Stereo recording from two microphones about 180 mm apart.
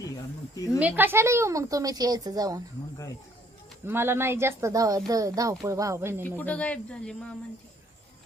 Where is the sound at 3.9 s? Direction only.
15° right (ahead or behind).